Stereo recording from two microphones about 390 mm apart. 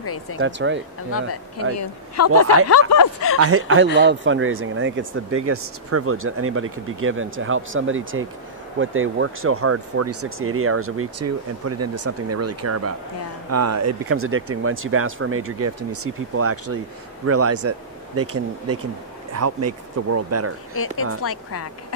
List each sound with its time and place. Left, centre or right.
0.0 s speech: left
0.4 s speech: right
1.1 s speech: left
3.3 s speech: right
21.2 s speech: left